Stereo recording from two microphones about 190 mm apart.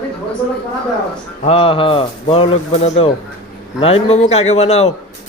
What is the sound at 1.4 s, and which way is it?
A man's voice, 30° left (ahead or behind).